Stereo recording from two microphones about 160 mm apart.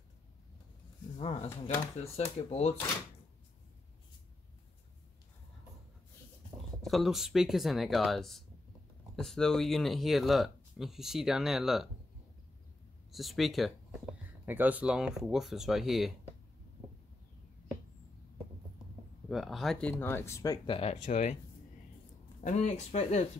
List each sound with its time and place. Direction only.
1.1 s speech: 40° left (ahead or behind)
6.8 s speech: centre (ahead or behind)
13.1 s speech: centre (ahead or behind)
14.4 s speech: 10° right (ahead or behind)
19.2 s speech: centre (ahead or behind); by 20.7 s 20° left (ahead or behind)
20.7 s speech: 45° left (ahead or behind)
22.4 s speech: 50° left (ahead or behind)